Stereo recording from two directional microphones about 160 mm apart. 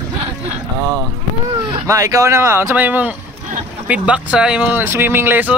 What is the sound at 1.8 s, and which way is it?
Speech, 20° right (ahead or behind).